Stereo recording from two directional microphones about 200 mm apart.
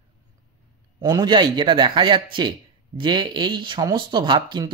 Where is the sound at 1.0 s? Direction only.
15° right (ahead or behind).